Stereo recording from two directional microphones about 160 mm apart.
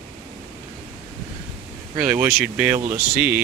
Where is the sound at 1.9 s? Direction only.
10° right (ahead or behind).